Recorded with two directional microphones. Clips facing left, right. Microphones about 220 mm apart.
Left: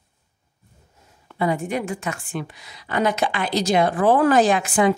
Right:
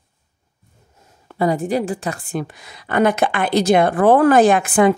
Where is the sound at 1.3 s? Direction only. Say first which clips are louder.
Right 4 dB; 40° right (ahead or behind).